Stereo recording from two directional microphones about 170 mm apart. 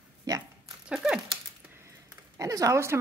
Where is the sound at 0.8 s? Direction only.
5° right (ahead or behind).